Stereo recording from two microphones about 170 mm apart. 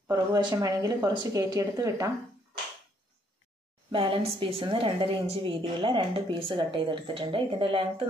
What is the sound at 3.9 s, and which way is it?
A woman's voice, 30° right (ahead or behind).